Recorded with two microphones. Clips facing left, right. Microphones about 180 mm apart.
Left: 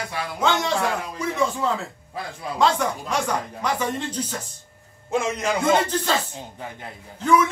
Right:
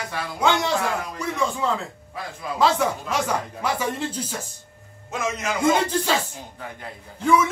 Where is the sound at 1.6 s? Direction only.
Centre (ahead or behind).